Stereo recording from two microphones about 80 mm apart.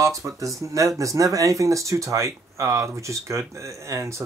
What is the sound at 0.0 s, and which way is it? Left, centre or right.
Speech, right.